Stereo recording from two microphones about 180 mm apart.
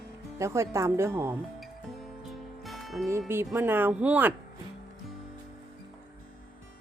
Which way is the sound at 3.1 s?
15° right (ahead or behind).